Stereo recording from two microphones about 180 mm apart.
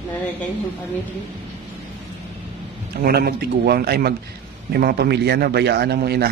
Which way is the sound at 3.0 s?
60° right (ahead or behind).